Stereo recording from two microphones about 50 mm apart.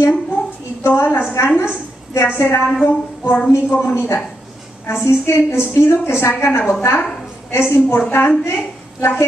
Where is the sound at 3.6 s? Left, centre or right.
Left.